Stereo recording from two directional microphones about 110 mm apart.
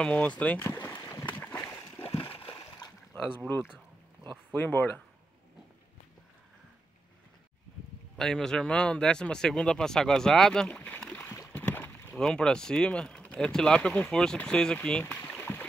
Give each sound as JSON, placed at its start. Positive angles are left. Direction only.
{"t": 0.0, "sound": "speech", "side_deg": 10}
{"t": 0.7, "sound": "a sound", "side_deg": 20}
{"t": 2.2, "sound": "a sound", "side_deg": 55}
{"t": 2.8, "sound": "boat", "side_deg": 40}
{"t": 3.3, "sound": "speech", "side_deg": 20}
{"t": 8.2, "sound": "speech", "side_deg": 5}
{"t": 11.5, "sound": "boat", "side_deg": 15}
{"t": 12.2, "sound": "speech", "side_deg": 5}